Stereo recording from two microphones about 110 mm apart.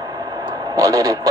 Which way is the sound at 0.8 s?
35° right (ahead or behind).